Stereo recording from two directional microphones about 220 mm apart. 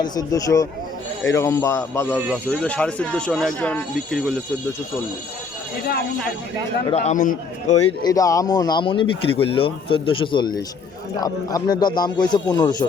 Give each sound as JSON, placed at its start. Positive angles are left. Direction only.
{"t": 0.0, "sound": "speech", "side_deg": 15}
{"t": 2.1, "sound": "speech", "side_deg": -5}
{"t": 2.5, "sound": "speech", "side_deg": 5}
{"t": 6.9, "sound": "a man's voice", "side_deg": 30}
{"t": 7.9, "sound": "speech", "side_deg": 15}